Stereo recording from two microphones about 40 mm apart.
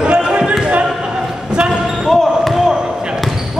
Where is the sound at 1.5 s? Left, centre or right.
Right.